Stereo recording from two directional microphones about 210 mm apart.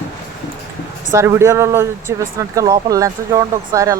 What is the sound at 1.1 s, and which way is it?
Speech, 10° right (ahead or behind).